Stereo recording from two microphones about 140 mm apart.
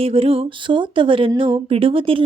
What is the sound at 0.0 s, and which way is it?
Speech, 45° right (ahead or behind).